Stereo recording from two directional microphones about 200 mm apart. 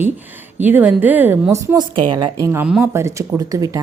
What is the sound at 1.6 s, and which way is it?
A woman's voice, 20° right (ahead or behind).